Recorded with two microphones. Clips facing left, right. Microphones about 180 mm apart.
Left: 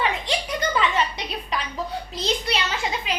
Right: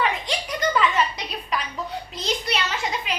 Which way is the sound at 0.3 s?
30° left (ahead or behind).